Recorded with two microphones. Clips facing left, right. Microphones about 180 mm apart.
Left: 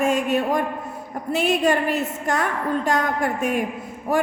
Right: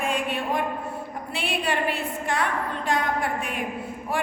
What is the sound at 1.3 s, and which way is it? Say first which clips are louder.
A woman's voice: left 8 dB; 45° left (ahead or behind).